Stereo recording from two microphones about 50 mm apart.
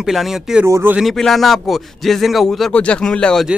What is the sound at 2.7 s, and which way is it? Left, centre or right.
Speech, left.